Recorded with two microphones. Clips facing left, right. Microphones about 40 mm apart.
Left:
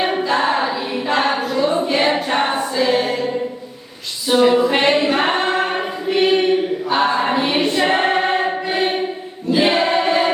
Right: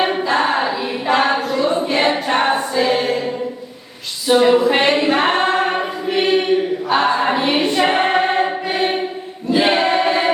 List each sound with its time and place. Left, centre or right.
0.0 s choir: centre
1.6 s a sound: centre
2.3 s choir: centre
4.3 s a capella: centre
4.6 s a sound: centre
5.0 s singing: centre
5.4 s choir: centre
6.8 s a capella: centre
9.6 s choir: centre